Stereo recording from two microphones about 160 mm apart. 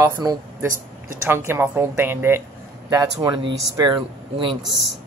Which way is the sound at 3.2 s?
25° right (ahead or behind).